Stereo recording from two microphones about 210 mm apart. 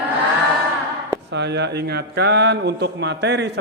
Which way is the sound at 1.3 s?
55° right (ahead or behind).